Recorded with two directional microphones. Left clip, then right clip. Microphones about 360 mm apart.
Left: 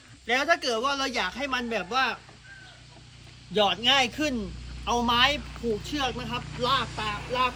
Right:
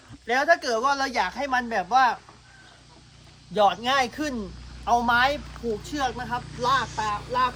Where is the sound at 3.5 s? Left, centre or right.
Centre.